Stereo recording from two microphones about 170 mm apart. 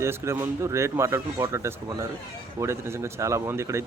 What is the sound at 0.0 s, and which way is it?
Speech, 15° right (ahead or behind).